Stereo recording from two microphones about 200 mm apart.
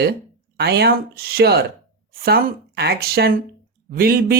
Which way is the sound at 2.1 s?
50° right (ahead or behind).